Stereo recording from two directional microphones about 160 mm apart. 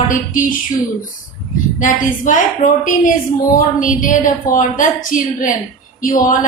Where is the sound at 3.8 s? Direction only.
55° left (ahead or behind).